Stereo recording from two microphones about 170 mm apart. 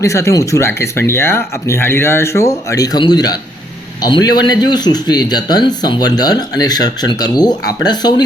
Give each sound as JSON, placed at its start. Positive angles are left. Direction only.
{"t": 0.0, "sound": "speech", "side_deg": 15}